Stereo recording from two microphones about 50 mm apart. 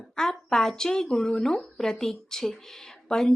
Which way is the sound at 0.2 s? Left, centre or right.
Centre.